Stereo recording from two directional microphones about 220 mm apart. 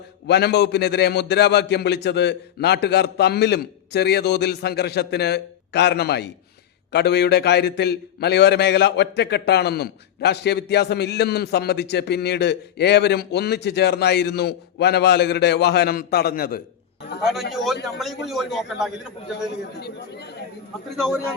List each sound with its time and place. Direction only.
0.3 s a man's voice: 50° left (ahead or behind)
17.5 s a man's voice: centre (ahead or behind)
19.8 s a man's voice: 50° left (ahead or behind)
20.9 s a man's voice: centre (ahead or behind)